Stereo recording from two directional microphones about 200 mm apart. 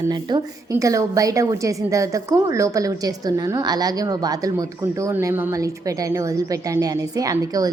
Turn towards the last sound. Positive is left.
turn(degrees=-20)  # may be behind; listen again after turning